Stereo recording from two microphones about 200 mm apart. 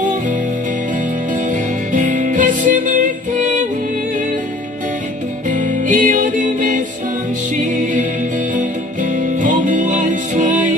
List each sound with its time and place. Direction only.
1.3 s music: 40° right (ahead or behind)
5.5 s music: 40° right (ahead or behind)